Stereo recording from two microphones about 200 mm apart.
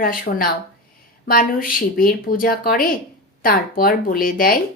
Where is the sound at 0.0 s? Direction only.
45° left (ahead or behind).